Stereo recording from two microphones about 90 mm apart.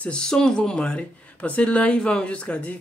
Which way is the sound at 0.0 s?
10° left (ahead or behind).